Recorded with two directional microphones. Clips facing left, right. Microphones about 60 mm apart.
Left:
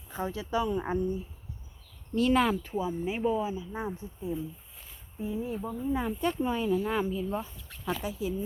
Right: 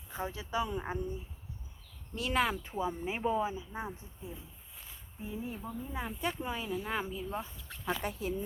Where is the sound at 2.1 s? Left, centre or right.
Centre.